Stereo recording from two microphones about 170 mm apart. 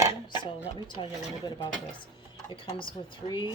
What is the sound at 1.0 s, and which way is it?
Speech, 25° left (ahead or behind).